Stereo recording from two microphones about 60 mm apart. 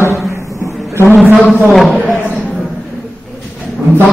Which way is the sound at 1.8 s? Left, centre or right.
Left.